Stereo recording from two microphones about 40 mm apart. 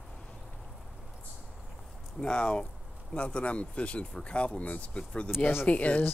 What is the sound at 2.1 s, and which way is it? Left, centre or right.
Speech, left.